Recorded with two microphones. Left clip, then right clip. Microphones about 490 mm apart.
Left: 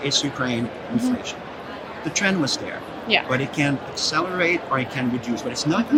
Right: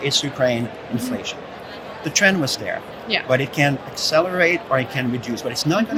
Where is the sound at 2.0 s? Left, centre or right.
Right.